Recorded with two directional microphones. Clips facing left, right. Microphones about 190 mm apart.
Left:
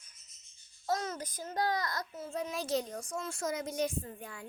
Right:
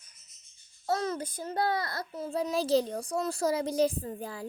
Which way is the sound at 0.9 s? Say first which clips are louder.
Right 4 dB; 35° right (ahead or behind).